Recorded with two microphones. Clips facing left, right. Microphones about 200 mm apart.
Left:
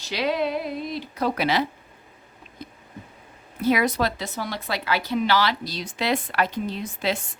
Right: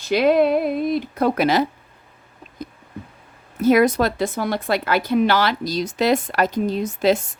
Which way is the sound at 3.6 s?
45° right (ahead or behind).